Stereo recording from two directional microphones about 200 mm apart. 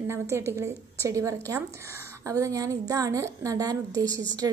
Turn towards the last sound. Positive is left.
turn(degrees=-20)  # may be behind; listen again after turning